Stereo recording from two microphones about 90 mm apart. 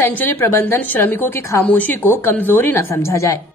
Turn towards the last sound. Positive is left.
turn(degrees=35)  # may be behind; listen again after turning